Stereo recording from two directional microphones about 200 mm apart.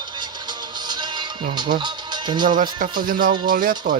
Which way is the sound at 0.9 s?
20° right (ahead or behind).